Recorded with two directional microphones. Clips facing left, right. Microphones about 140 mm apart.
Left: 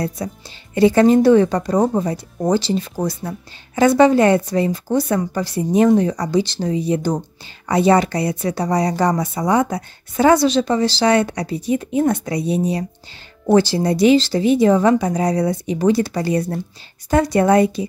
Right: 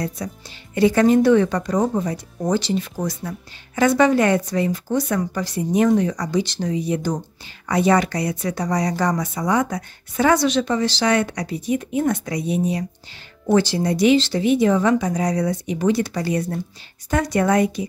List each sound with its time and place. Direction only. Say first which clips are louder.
0.2 s speech: left 3 dB; 30° left (ahead or behind)